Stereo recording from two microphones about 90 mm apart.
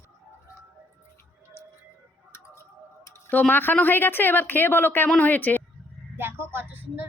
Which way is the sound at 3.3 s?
20° left (ahead or behind).